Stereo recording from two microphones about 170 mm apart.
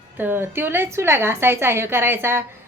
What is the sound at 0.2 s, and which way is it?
A woman's voice, 10° right (ahead or behind).